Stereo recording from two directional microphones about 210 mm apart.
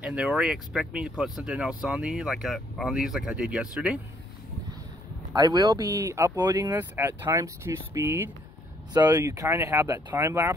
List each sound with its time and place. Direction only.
0.0 s speech: 5° right (ahead or behind)
5.3 s speech: 20° right (ahead or behind)